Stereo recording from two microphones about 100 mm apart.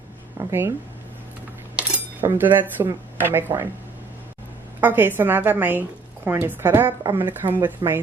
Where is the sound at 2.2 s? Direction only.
20° right (ahead or behind).